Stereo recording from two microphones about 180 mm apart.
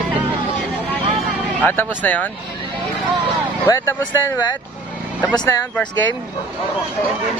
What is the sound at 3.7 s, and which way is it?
Speech, 15° left (ahead or behind).